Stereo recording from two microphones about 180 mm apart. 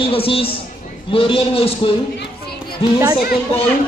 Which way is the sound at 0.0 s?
30° left (ahead or behind).